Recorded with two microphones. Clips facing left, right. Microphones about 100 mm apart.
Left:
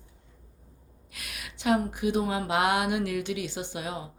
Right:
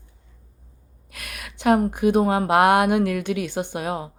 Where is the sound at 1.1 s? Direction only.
55° right (ahead or behind).